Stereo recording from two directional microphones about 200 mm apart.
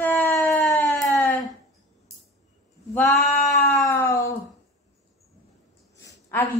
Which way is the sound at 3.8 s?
15° left (ahead or behind).